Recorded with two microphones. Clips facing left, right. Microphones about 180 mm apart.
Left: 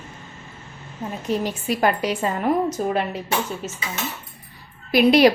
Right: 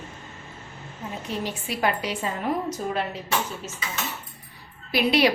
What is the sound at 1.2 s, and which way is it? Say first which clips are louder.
A woman's voice: left 8 dB; 45° left (ahead or behind).